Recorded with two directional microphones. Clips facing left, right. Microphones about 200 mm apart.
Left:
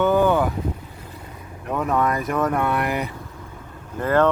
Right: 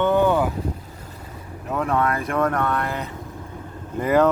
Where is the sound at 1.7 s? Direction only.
5° left (ahead or behind).